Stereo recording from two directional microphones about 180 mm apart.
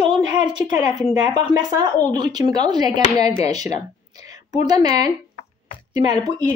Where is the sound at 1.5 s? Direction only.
20° right (ahead or behind).